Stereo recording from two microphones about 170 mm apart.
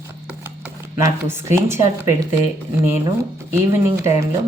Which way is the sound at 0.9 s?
15° right (ahead or behind).